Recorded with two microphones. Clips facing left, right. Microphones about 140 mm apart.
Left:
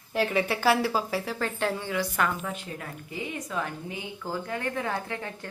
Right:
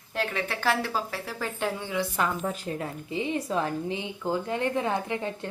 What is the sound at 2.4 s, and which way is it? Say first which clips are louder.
A woman's voice: right 5 dB; 30° right (ahead or behind).